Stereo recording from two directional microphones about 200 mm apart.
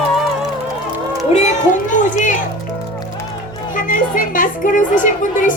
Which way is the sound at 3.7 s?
40° left (ahead or behind).